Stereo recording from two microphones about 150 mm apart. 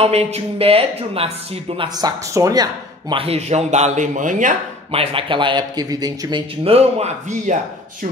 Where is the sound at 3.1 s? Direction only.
40° right (ahead or behind); by 4.5 s 55° right (ahead or behind).